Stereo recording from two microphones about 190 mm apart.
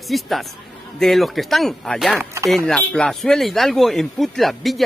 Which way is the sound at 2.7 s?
5° left (ahead or behind).